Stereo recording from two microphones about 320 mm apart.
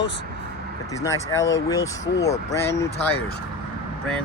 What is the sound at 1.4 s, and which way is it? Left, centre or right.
Speech, left.